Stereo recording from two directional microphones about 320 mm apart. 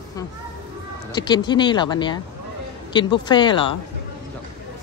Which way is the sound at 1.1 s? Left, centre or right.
Centre.